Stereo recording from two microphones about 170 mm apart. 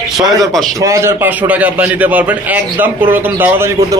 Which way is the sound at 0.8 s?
15° right (ahead or behind).